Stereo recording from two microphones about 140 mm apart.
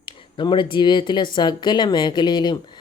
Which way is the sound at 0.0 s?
35° left (ahead or behind).